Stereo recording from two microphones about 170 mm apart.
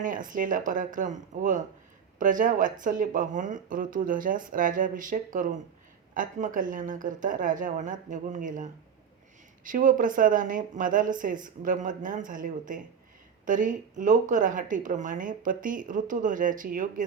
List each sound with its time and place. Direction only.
0.0 s speech: 50° right (ahead or behind)